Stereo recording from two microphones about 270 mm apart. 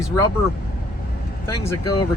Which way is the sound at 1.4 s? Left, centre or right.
Centre.